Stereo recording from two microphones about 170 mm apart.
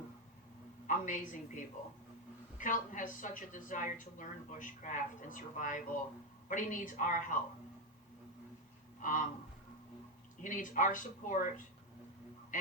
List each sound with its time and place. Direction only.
0.9 s a woman's voice: 50° left (ahead or behind)
9.0 s speech: 50° left (ahead or behind)
10.4 s a woman's voice: 50° left (ahead or behind)